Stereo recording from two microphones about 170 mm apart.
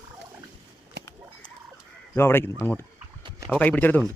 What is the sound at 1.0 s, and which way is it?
Bird, 75° right (ahead or behind).